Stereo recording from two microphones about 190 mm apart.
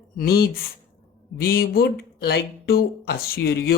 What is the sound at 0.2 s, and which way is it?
Speech, 55° left (ahead or behind).